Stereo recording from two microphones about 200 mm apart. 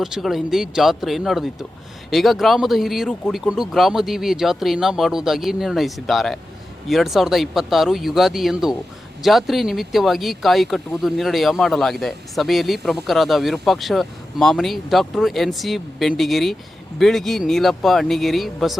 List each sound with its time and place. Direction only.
0.0 s speech: centre (ahead or behind)